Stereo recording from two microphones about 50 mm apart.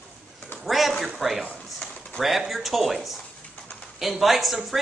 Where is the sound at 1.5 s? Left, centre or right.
Left.